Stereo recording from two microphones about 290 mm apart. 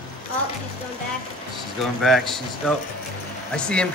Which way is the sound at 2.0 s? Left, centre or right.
Centre.